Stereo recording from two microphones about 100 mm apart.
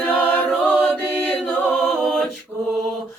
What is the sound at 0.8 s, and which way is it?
Music, 5° left (ahead or behind).